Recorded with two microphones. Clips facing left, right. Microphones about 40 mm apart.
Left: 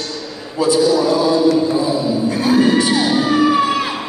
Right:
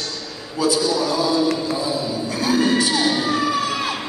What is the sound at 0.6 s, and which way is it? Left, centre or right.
Speech, left.